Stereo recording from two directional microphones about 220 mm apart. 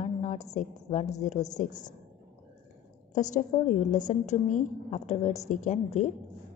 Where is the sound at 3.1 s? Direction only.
35° left (ahead or behind).